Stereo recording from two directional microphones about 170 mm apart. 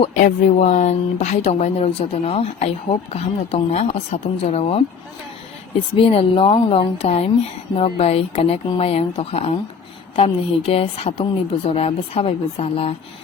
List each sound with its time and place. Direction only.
0.7 s speech: 40° left (ahead or behind)